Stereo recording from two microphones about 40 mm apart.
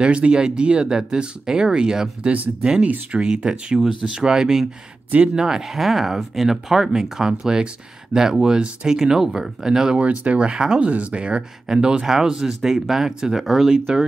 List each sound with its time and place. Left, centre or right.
0.0 s speech: right
2.2 s speech: right
3.1 s speech: centre
9.9 s speech: right
11.6 s speech: centre